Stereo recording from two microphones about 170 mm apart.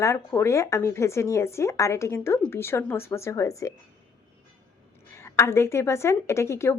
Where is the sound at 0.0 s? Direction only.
15° left (ahead or behind).